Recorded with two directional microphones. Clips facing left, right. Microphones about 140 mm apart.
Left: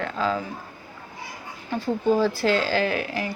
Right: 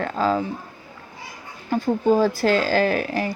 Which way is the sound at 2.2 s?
45° right (ahead or behind).